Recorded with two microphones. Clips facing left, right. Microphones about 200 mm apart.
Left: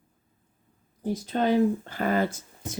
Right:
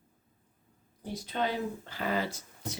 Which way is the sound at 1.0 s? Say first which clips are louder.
Left 8 dB; 45° left (ahead or behind).